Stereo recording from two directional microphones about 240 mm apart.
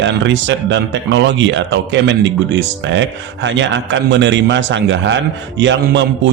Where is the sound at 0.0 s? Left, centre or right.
Right.